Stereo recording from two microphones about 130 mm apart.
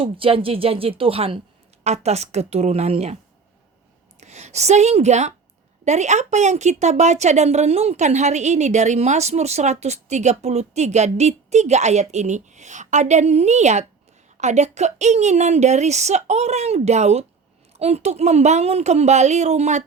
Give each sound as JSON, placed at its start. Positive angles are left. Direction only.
{"t": 0.0, "sound": "a woman's voice", "side_deg": -45}
{"t": 4.2, "sound": "a woman's voice", "side_deg": -60}